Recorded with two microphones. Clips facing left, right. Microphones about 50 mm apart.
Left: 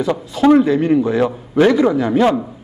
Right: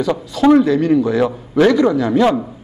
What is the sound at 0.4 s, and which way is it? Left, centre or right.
A man's voice, centre.